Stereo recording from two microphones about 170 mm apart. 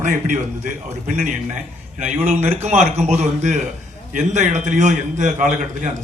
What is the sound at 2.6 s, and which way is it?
A man's voice, 40° right (ahead or behind).